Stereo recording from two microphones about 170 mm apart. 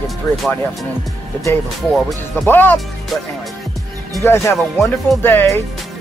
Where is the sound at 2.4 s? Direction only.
10° left (ahead or behind).